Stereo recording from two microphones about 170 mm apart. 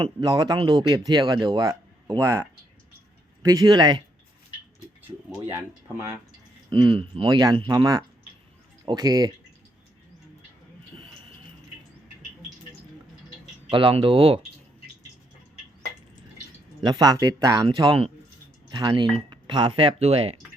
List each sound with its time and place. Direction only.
0.0 s speech: 25° right (ahead or behind)
6.7 s speech: 30° right (ahead or behind)
13.7 s speech: 30° right (ahead or behind)
16.8 s speech: 25° right (ahead or behind)